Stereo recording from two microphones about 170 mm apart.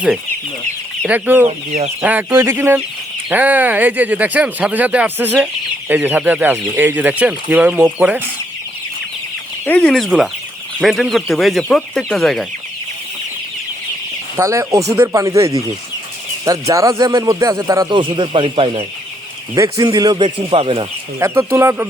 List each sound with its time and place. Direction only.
1.0 s speech: 10° right (ahead or behind)
1.5 s speech: 40° right (ahead or behind)
2.0 s speech: 10° right (ahead or behind)
9.6 s speech: 10° left (ahead or behind)
14.3 s a man's voice: 20° right (ahead or behind)
19.5 s a man's voice: 20° right (ahead or behind)
21.2 s speech: 15° right (ahead or behind)